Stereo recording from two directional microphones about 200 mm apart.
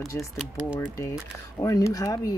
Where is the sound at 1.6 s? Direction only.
15° left (ahead or behind).